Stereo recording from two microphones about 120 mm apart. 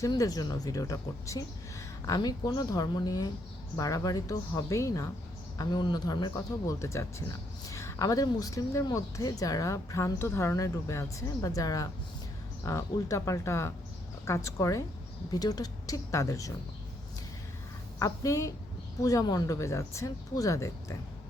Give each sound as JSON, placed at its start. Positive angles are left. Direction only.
{"t": 0.1, "sound": "speech", "side_deg": 30}
{"t": 18.0, "sound": "speech", "side_deg": 25}